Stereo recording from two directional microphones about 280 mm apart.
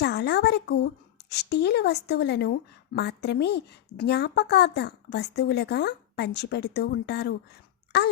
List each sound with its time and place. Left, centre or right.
0.0 s a woman's voice: left